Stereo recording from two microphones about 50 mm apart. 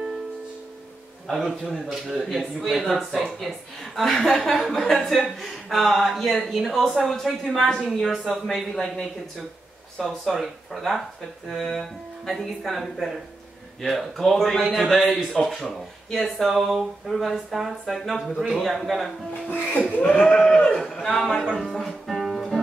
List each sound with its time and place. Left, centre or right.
1.2 s a man's voice: centre
8.7 s a man's voice: centre
19.5 s speech: left
20.0 s speech: centre
20.8 s a man's voice: centre
21.5 s speech: centre
21.7 s music: centre